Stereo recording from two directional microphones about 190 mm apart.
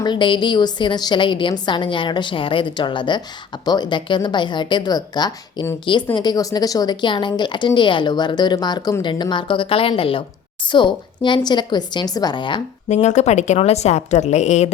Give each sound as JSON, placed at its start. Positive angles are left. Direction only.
{"t": 0.0, "sound": "a woman's voice", "side_deg": 25}
{"t": 12.9, "sound": "a woman's voice", "side_deg": 40}